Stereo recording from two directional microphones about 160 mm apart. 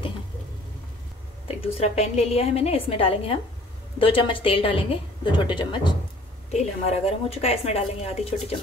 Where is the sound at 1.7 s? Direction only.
40° left (ahead or behind).